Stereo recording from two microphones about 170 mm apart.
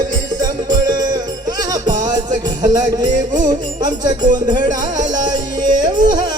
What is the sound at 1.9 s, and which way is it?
Music, 45° right (ahead or behind).